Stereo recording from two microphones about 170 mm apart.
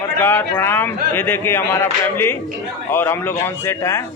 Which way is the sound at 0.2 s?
15° left (ahead or behind).